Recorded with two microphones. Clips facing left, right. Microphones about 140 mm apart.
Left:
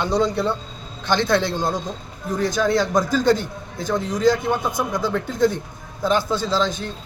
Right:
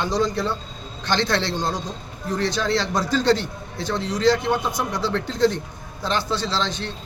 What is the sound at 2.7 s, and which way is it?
A man's voice, 50° left (ahead or behind).